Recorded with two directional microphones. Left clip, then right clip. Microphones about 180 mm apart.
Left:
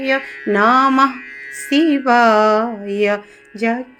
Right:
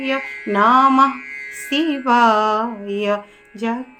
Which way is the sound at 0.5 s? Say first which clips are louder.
Even; 35° left (ahead or behind).